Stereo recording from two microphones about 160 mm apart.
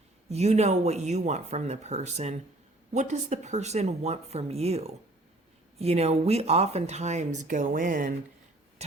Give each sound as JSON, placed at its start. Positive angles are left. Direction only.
{"t": 0.3, "sound": "speech", "side_deg": -40}